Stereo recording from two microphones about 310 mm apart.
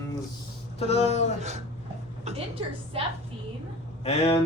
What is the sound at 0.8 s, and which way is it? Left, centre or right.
Speech, left.